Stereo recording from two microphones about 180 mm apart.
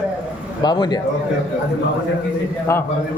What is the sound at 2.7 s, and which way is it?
Speech, 15° left (ahead or behind).